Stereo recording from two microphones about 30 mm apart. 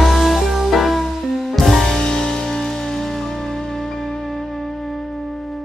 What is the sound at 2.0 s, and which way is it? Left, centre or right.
Music, left.